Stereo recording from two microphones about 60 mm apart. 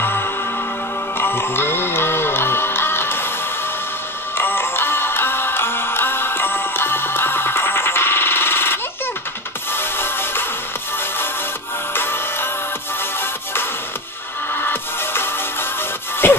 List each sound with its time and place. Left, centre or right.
0.0 s music: left
4.4 s music: left
11.9 s music: left
14.5 s music: left
16.2 s a sound: left